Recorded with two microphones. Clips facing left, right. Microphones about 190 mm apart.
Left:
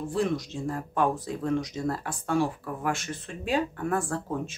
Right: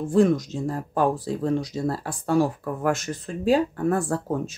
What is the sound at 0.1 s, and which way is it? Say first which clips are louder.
Speech: right 10 dB; 45° right (ahead or behind).